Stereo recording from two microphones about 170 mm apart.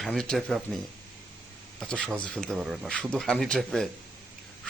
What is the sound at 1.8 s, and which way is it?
Speech, 5° left (ahead or behind).